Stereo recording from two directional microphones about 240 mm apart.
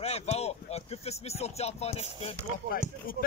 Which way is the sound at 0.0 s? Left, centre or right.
Left.